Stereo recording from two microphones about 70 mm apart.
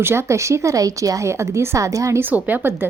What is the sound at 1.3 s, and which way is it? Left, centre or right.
Speech, right.